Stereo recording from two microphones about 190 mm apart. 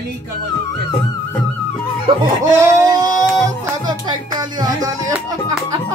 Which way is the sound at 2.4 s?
20° right (ahead or behind).